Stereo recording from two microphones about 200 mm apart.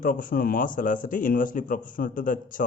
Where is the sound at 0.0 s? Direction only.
45° left (ahead or behind).